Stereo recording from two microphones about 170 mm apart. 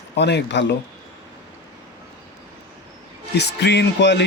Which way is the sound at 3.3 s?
80° left.